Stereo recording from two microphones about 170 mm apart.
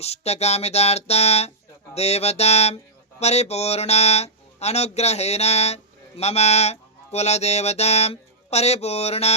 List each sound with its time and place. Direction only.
0.0 s music: 40° left (ahead or behind)
3.2 s speech: 40° left (ahead or behind)